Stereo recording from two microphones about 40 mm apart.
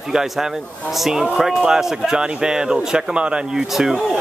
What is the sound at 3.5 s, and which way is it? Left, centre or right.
Speech, centre.